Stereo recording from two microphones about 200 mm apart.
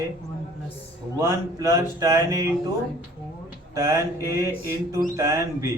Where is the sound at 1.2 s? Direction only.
15° right (ahead or behind).